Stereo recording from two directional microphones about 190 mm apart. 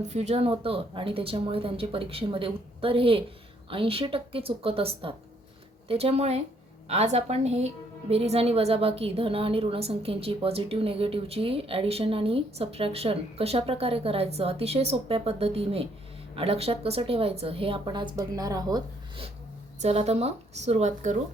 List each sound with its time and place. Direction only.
0.1 s a woman's voice: 35° right (ahead or behind)